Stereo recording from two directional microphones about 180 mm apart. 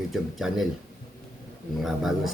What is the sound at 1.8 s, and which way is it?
Speech, centre (ahead or behind).